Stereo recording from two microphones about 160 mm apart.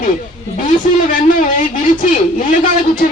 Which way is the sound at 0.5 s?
50° left (ahead or behind).